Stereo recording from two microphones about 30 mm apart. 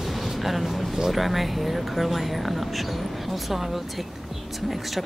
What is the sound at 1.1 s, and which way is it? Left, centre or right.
Speech, centre.